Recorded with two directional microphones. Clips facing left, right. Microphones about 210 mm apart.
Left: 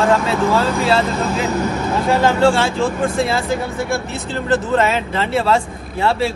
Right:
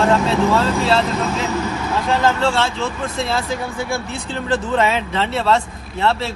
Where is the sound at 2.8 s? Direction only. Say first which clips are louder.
Left 6 dB; 50° left (ahead or behind).